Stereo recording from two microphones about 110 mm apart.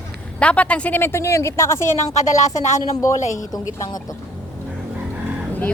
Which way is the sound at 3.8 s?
35° left (ahead or behind).